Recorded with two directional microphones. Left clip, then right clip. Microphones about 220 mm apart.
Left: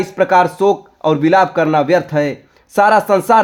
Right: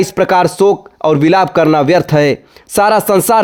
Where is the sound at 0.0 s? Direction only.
45° right (ahead or behind).